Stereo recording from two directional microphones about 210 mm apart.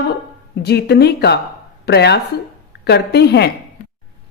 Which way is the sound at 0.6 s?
50° left (ahead or behind).